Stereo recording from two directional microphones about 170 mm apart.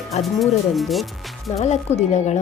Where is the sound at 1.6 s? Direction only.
40° left (ahead or behind).